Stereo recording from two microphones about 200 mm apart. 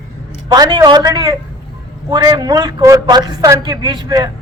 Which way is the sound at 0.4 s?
20° right (ahead or behind).